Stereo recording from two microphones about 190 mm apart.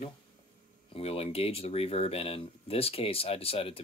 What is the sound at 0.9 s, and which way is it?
Speech, 30° left (ahead or behind).